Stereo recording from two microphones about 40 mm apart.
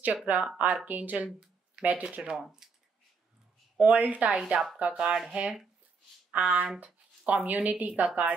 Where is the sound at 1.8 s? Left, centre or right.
Right.